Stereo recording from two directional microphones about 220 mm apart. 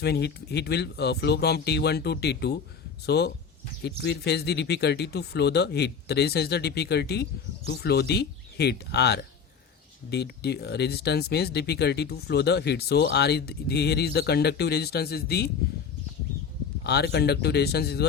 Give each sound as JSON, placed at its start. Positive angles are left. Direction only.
{"t": 0.0, "sound": "speech", "side_deg": 50}
{"t": 16.8, "sound": "speech", "side_deg": 50}